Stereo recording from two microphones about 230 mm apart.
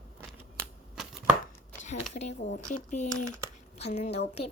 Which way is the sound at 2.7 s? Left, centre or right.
Left.